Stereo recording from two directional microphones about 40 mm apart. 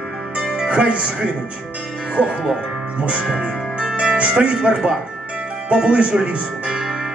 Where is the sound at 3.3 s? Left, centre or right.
Right.